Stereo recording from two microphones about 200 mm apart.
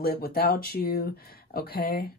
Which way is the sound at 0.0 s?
50° left (ahead or behind).